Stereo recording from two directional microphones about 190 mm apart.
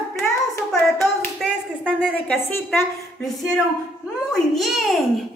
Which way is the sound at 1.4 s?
Centre (ahead or behind).